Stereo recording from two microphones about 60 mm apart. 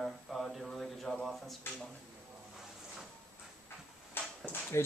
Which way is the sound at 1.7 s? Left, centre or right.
Left.